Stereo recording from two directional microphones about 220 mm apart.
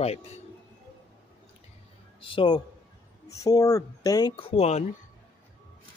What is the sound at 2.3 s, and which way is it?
Speech, 20° left (ahead or behind).